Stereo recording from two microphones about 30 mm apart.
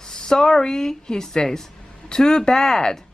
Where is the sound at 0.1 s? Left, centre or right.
Left.